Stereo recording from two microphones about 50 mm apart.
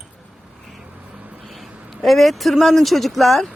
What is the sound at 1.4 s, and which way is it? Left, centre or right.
Speech, centre.